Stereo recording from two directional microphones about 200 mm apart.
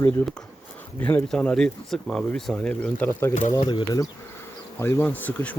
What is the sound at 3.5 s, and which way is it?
Speech, 25° left (ahead or behind).